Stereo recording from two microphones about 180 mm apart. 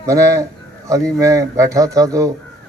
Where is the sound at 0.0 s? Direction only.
15° right (ahead or behind).